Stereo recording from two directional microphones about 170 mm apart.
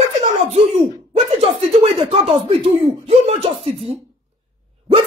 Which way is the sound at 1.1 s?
35° right (ahead or behind).